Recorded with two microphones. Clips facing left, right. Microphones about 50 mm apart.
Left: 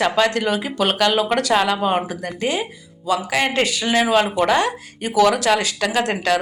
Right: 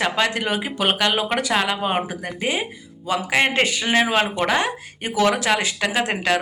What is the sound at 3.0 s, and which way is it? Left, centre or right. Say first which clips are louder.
Speech: even; right.